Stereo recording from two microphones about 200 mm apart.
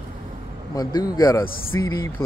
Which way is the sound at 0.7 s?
20° left (ahead or behind).